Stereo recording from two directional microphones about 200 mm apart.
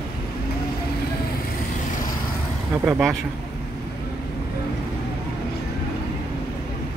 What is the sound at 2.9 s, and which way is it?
Speech, centre (ahead or behind).